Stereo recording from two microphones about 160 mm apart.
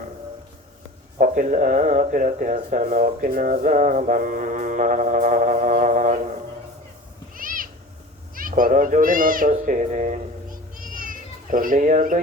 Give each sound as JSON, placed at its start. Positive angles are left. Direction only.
{"t": 1.2, "sound": "speech", "side_deg": -55}
{"t": 7.3, "sound": "cat", "side_deg": -60}
{"t": 8.4, "sound": "speech", "side_deg": -60}